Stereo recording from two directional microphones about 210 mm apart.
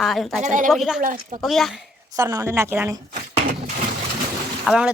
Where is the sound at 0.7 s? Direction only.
Centre (ahead or behind).